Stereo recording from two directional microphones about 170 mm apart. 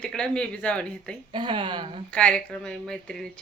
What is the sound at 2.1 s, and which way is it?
Speech, 5° left (ahead or behind).